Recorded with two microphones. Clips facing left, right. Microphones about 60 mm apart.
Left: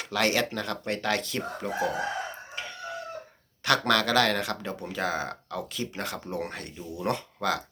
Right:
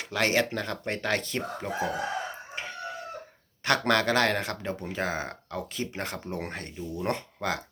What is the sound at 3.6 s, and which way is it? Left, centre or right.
Speech, right.